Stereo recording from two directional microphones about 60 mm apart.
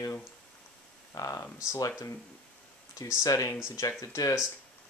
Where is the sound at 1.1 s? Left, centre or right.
Left.